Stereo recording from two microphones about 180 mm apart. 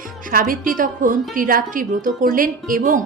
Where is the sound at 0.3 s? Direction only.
50° right (ahead or behind).